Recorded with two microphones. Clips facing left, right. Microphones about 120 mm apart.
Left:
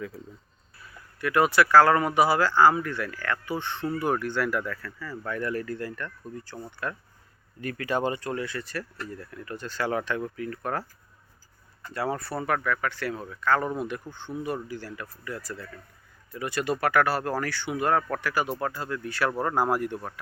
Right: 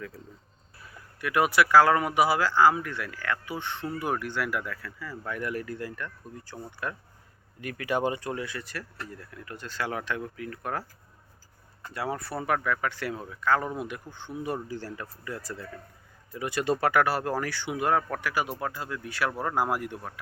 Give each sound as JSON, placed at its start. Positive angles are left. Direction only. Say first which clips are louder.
{"t": 1.2, "sound": "speech", "louder": "left 2 dB", "side_deg": -10}
{"t": 11.9, "sound": "speech", "louder": "left 3 dB", "side_deg": -5}
{"t": 14.4, "sound": "speech", "louder": "right 1 dB", "side_deg": -25}